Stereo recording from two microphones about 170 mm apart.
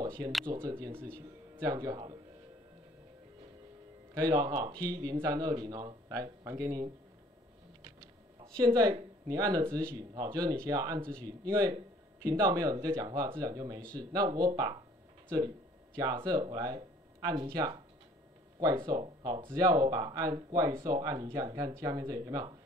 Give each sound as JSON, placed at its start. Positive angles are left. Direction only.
{"t": 0.0, "sound": "a sound", "side_deg": -25}
{"t": 0.5, "sound": "speech", "side_deg": -20}
{"t": 4.1, "sound": "speech", "side_deg": -20}
{"t": 8.5, "sound": "speech", "side_deg": -20}